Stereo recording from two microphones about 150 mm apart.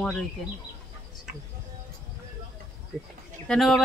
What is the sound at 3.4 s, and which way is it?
Speech, centre (ahead or behind).